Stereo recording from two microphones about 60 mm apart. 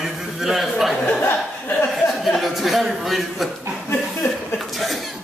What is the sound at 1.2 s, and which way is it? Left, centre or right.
Speech, left.